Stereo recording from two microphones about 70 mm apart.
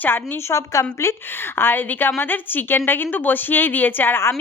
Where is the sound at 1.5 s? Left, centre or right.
Left.